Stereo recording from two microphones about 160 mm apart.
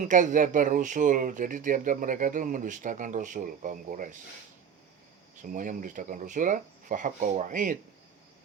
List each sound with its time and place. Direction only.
0.0 s speech: 55° right (ahead or behind)
5.5 s speech: 55° right (ahead or behind)